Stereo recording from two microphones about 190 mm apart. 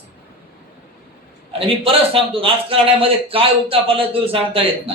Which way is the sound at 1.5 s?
30° right (ahead or behind).